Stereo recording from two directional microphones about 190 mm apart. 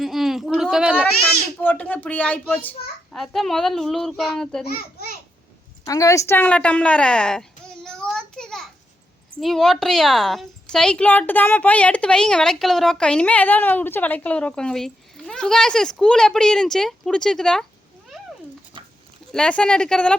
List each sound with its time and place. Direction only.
0.0 s a sound: centre (ahead or behind)
1.6 s a woman's voice: 10° left (ahead or behind)
4.6 s a child's voice: 55° left (ahead or behind)
5.8 s a sound: 15° left (ahead or behind); by 8.7 s centre (ahead or behind)
9.4 s a woman's voice: centre (ahead or behind)
18.1 s cat: centre (ahead or behind)
19.3 s a woman's voice: 5° left (ahead or behind)